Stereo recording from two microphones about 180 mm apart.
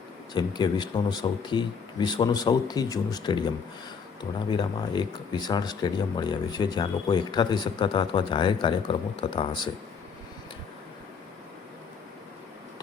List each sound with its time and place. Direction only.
0.3 s speech: 25° left (ahead or behind)